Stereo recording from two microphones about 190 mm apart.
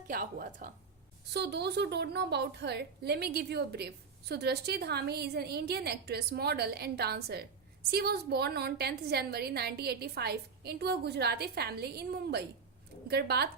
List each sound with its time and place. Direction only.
0.1 s speech: 50° right (ahead or behind)
1.3 s a woman's voice: 60° right (ahead or behind)